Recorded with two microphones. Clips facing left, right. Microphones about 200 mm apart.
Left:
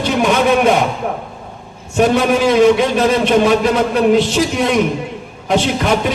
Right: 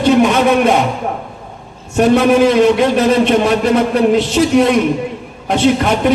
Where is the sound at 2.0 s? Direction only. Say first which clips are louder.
Right 3 dB; 55° right (ahead or behind).